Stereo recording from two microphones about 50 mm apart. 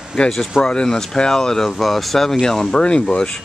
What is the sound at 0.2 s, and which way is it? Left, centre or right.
Speech, centre.